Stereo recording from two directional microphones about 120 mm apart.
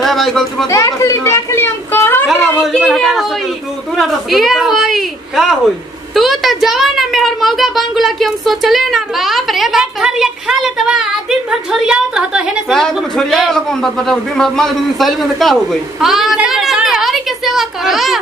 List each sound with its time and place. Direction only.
0.0 s a child's voice: centre (ahead or behind)
0.7 s speech: 25° left (ahead or behind)
2.6 s a child's voice: centre (ahead or behind)